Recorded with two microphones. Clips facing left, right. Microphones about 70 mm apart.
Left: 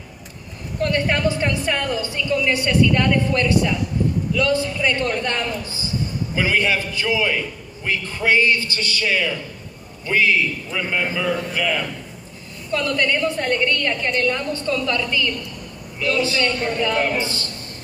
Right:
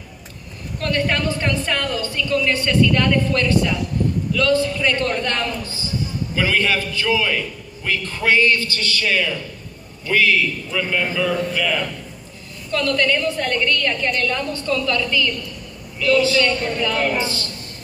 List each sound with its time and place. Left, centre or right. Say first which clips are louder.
0.7 s a man's voice: left 1 dB; left
10.0 s a man's voice: right 1 dB; left